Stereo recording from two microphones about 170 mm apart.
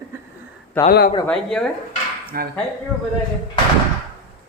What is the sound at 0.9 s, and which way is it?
Speech, 60° left (ahead or behind).